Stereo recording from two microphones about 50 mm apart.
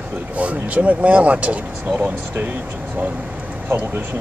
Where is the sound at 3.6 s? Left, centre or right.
Right.